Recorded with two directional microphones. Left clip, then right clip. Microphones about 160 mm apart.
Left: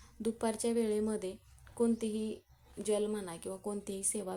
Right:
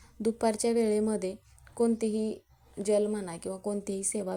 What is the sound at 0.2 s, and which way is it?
A woman's voice, 20° right (ahead or behind).